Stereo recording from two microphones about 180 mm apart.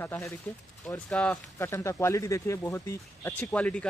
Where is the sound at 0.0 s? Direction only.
10° left (ahead or behind).